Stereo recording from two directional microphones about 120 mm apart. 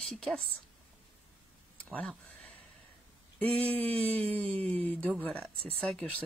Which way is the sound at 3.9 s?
55° right (ahead or behind).